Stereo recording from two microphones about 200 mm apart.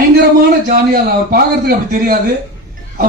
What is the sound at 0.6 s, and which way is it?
A man's voice, 50° right (ahead or behind).